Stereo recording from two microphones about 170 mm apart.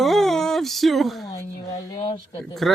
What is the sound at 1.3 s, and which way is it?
Speech, 20° left (ahead or behind).